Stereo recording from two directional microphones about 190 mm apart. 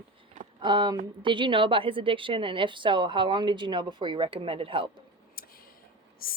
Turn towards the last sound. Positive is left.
turn(degrees=50)  # may be behind; listen again after turning